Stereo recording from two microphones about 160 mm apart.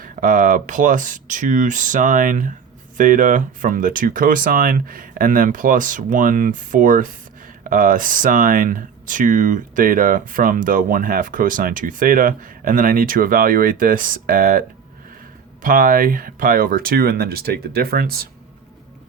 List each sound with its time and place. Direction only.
0.0 s speech: 60° right (ahead or behind)
15.6 s speech: 60° right (ahead or behind)